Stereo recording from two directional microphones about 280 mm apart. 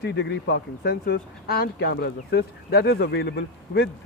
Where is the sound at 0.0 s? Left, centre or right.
Left.